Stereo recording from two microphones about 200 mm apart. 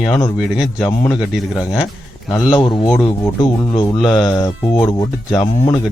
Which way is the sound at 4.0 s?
Centre (ahead or behind).